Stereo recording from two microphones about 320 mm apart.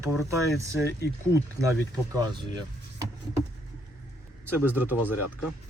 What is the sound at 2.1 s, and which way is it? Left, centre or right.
Speech, centre.